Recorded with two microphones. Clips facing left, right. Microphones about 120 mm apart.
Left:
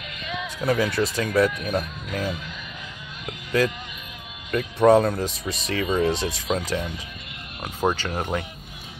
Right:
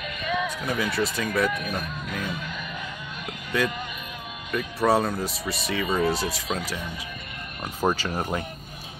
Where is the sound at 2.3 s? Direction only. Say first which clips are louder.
Even; 50° right (ahead or behind).